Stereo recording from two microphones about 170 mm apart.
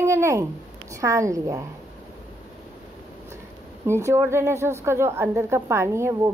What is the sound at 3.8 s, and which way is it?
A woman's voice, 15° right (ahead or behind).